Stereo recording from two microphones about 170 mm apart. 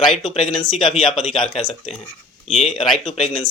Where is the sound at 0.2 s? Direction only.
35° left (ahead or behind).